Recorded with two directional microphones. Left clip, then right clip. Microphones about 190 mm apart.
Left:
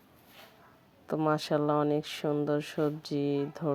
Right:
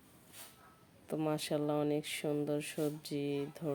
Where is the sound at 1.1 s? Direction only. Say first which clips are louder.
Left 7 dB; 10° left (ahead or behind).